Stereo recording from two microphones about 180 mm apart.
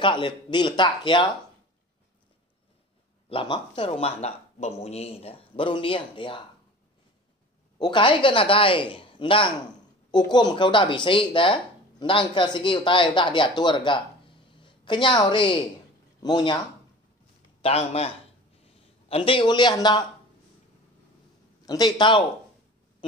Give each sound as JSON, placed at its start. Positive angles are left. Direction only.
{"t": 0.0, "sound": "speech", "side_deg": 25}
{"t": 3.3, "sound": "speech", "side_deg": 30}
{"t": 7.8, "sound": "speech", "side_deg": 25}
{"t": 17.6, "sound": "a man's voice", "side_deg": 35}
{"t": 21.6, "sound": "speech", "side_deg": 20}